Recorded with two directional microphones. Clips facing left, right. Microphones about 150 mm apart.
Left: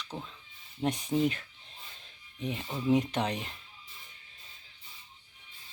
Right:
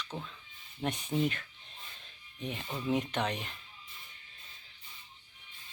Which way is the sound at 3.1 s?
30° left (ahead or behind).